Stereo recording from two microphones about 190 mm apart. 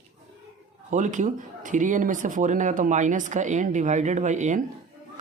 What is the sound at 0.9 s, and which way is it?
Speech, 40° right (ahead or behind).